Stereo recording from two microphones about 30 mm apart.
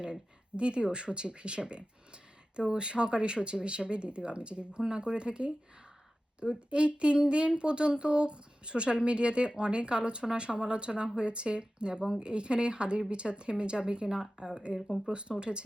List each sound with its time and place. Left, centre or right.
0.0 s speech: right